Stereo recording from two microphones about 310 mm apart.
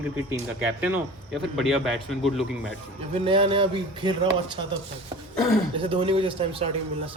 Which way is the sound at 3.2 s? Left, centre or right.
Centre.